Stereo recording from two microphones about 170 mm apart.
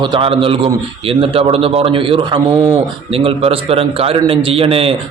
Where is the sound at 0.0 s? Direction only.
30° right (ahead or behind).